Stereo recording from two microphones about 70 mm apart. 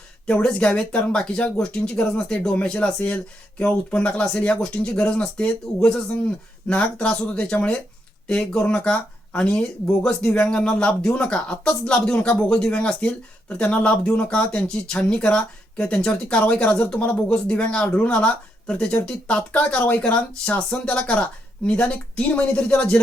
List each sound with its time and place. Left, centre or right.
0.3 s speech: centre